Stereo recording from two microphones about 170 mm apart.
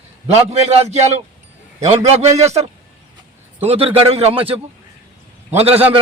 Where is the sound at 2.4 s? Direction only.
40° right (ahead or behind).